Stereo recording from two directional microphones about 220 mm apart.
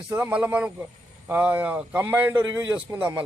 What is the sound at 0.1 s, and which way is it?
A man's voice, 10° right (ahead or behind).